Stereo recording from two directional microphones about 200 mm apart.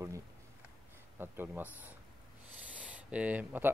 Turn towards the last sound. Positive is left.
turn(degrees=-10)  # may be behind; listen again after turning